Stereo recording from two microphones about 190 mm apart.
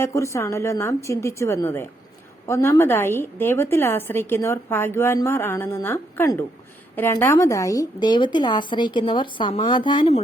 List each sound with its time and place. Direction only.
0.0 s a woman's voice: 15° left (ahead or behind)